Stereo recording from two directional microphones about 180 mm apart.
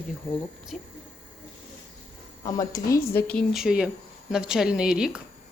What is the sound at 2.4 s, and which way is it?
Speech, 20° left (ahead or behind).